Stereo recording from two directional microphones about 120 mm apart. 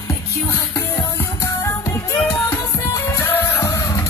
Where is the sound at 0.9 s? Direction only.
20° left (ahead or behind).